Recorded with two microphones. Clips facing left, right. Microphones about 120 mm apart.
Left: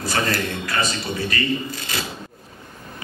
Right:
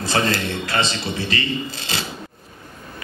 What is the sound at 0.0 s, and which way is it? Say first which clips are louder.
A man's voice: right 2 dB; 25° right (ahead or behind).